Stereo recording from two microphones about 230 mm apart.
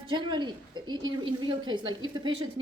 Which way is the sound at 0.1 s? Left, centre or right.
Right.